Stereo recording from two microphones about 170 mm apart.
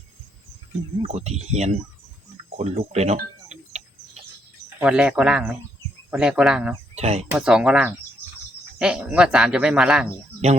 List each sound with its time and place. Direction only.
1.0 s speech: 40° right (ahead or behind)
3.5 s a sound: 40° right (ahead or behind)
4.8 s speech: 5° right (ahead or behind)
6.9 s speech: 40° right (ahead or behind)
7.3 s speech: 5° right (ahead or behind)